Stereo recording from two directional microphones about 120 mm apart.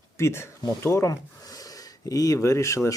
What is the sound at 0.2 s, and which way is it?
Speech, 20° left (ahead or behind).